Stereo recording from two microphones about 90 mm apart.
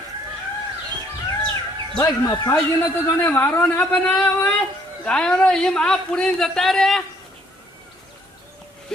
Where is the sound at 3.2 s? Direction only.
20° left (ahead or behind); by 7.0 s 5° left (ahead or behind).